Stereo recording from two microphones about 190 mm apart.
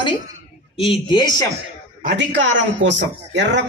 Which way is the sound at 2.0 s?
70° right (ahead or behind).